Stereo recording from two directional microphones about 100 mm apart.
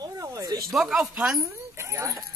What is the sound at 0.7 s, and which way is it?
Speech, centre (ahead or behind).